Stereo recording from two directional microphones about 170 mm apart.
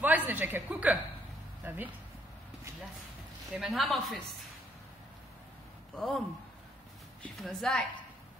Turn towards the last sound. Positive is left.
turn(degrees=0)  # may be behind; listen again after turning